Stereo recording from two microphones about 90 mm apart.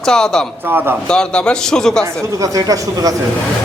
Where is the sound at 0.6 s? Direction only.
25° right (ahead or behind).